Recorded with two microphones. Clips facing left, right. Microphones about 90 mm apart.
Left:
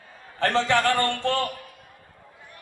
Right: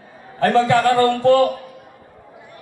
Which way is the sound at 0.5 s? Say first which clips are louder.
Right 7 dB; 45° right (ahead or behind).